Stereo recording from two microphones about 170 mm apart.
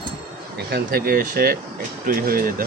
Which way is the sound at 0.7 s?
65° right (ahead or behind).